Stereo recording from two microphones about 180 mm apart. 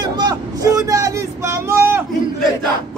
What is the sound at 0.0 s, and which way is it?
Vehicle, 25° right (ahead or behind).